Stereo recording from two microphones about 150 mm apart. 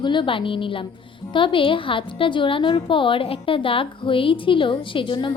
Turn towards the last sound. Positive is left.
turn(degrees=35)  # may be behind; listen again after turning